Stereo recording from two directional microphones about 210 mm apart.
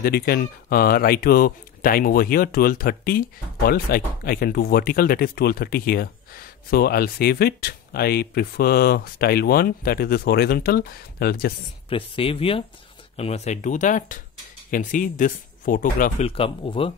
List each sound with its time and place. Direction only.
0.0 s speech: 50° left (ahead or behind)
11.9 s speech: 25° left (ahead or behind)